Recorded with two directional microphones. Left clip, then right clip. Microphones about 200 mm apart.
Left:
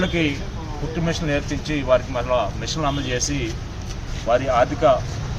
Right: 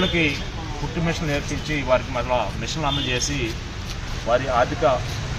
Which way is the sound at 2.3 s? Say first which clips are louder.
Left 2 dB; 15° left (ahead or behind).